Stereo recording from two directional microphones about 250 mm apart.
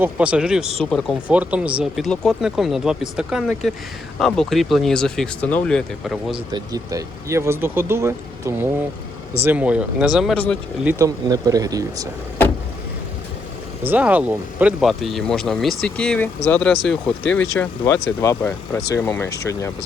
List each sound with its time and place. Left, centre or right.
0.0 s speech: centre
6.3 s speech: centre
10.8 s speech: centre
13.8 s speech: centre